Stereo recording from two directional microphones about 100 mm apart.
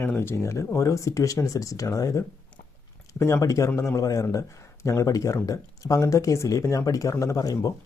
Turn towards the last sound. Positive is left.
turn(degrees=35)  # may be behind; listen again after turning